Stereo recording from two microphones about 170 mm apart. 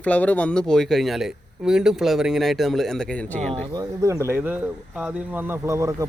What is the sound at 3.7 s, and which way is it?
Speech, 20° right (ahead or behind).